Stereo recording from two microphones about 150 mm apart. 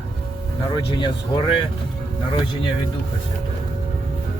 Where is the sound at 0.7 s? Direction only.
30° left (ahead or behind).